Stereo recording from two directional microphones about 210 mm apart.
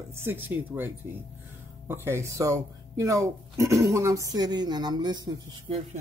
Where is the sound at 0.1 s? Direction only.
10° right (ahead or behind).